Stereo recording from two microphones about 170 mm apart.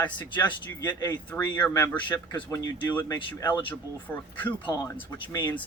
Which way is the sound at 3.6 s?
10° left (ahead or behind).